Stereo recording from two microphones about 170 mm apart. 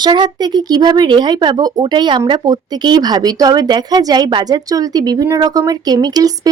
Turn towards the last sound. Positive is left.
turn(degrees=-25)  # may be behind; listen again after turning